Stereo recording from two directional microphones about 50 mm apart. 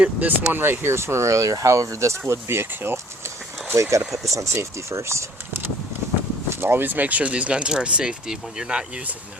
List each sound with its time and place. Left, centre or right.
0.0 s speech: right
3.8 s speech: right
6.6 s speech: right; by 8.8 s centre